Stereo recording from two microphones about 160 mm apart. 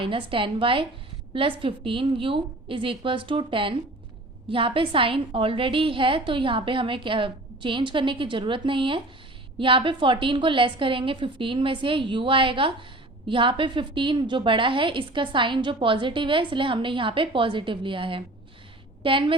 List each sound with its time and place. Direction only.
0.0 s a woman's voice: 35° right (ahead or behind)